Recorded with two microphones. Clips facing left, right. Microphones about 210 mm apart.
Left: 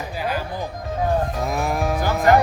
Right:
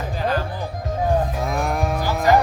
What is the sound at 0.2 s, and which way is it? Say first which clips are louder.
Music: right 3 dB; 10° left (ahead or behind).